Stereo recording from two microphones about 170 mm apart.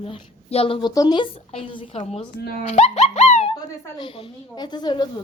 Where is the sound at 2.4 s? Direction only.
65° left (ahead or behind).